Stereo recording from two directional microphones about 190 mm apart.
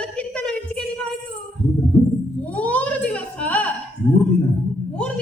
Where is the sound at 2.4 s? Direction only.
5° left (ahead or behind).